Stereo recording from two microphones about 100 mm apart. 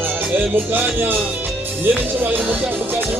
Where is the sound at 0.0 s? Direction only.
20° right (ahead or behind).